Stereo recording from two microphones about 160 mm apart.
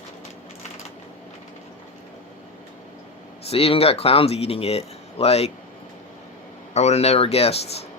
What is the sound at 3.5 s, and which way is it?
Speech, 40° left (ahead or behind).